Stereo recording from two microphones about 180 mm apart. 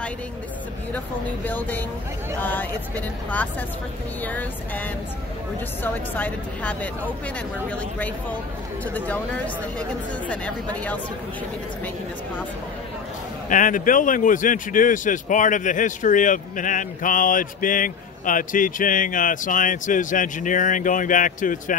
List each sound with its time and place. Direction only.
0.9 s speech: 10° left (ahead or behind)
4.2 s speech: 10° left (ahead or behind)
6.1 s speech: 10° left (ahead or behind)
13.5 s speech: 45° left (ahead or behind)